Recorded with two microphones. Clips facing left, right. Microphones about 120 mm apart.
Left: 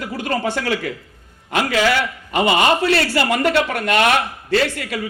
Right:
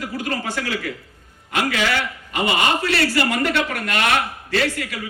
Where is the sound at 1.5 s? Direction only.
35° left (ahead or behind).